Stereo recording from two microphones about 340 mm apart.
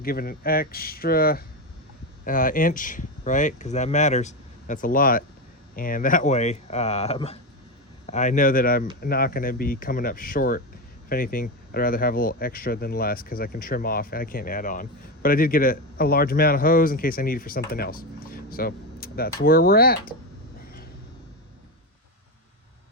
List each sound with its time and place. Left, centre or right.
0.0 s speech: left